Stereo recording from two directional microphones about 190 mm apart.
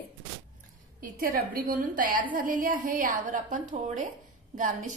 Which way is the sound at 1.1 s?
50° right (ahead or behind).